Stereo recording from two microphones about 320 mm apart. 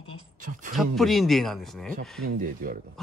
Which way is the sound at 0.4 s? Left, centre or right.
Right.